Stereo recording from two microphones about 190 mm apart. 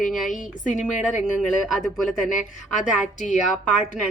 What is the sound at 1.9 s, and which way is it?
Speech, centre (ahead or behind).